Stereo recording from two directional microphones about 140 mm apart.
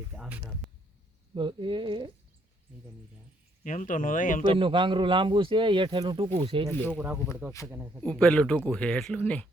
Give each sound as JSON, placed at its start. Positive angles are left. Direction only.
{"t": 0.1, "sound": "speech", "side_deg": -5}
{"t": 1.4, "sound": "speech", "side_deg": -35}
{"t": 3.6, "sound": "speech", "side_deg": 65}
{"t": 4.5, "sound": "speech", "side_deg": -35}
{"t": 6.9, "sound": "speech", "side_deg": -10}
{"t": 8.0, "sound": "speech", "side_deg": 5}